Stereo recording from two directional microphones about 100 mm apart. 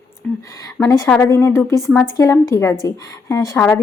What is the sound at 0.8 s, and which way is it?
Speech, 40° left (ahead or behind).